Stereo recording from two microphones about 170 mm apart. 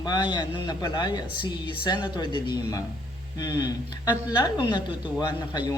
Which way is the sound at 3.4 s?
25° left (ahead or behind).